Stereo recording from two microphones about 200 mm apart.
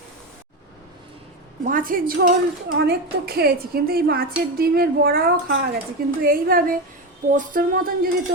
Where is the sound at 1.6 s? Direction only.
45° right (ahead or behind).